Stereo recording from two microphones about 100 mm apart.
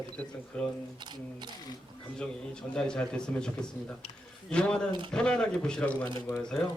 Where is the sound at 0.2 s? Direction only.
10° left (ahead or behind).